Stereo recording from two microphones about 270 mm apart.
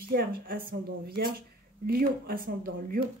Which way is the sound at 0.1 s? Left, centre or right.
Right.